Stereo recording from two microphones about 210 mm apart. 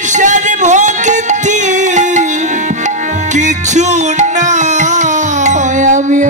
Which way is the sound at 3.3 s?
35° right (ahead or behind).